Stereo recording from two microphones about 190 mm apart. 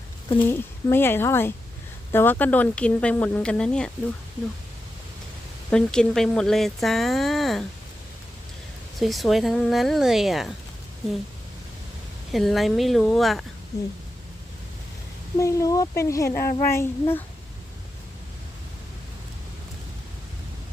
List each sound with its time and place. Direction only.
0.4 s speech: 10° left (ahead or behind)
5.7 s speech: 5° left (ahead or behind)
9.0 s speech: centre (ahead or behind)
12.3 s speech: centre (ahead or behind)
15.4 s speech: 15° left (ahead or behind)
16.3 s child singing: 50° left (ahead or behind)
16.6 s speech: 15° left (ahead or behind)